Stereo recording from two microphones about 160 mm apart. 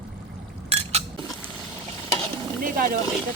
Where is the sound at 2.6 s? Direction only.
60° right (ahead or behind).